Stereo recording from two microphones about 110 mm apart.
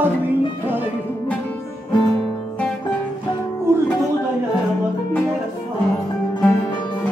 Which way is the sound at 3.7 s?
25° right (ahead or behind).